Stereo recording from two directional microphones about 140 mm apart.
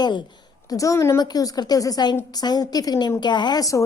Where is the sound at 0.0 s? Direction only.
35° left (ahead or behind).